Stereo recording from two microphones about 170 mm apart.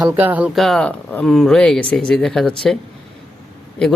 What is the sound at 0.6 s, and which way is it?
Speech, centre (ahead or behind).